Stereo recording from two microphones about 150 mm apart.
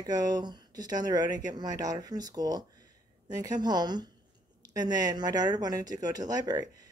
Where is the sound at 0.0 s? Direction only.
25° right (ahead or behind).